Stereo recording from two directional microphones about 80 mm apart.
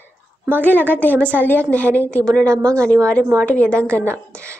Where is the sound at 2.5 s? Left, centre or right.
Right.